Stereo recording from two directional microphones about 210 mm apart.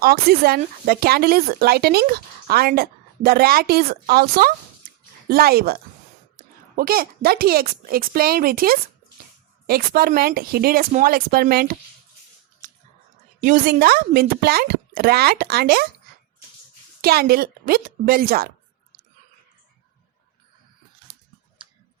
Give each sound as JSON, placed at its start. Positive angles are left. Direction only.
{"t": 0.0, "sound": "a woman's voice", "side_deg": -45}
{"t": 13.4, "sound": "speech", "side_deg": -40}
{"t": 17.0, "sound": "speech", "side_deg": -45}
{"t": 21.6, "sound": "clicking", "side_deg": -25}